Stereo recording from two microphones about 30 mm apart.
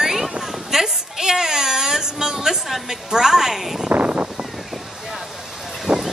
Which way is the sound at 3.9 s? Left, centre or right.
Right.